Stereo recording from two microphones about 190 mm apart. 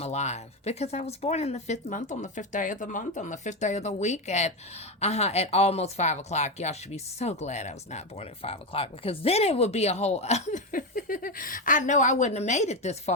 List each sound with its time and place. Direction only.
0.0 s speech: 35° left (ahead or behind)